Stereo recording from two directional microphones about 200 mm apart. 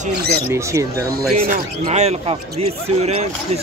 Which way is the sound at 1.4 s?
40° right (ahead or behind).